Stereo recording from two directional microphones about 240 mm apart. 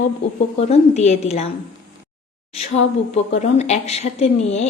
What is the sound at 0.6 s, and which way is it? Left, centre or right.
Speech, left.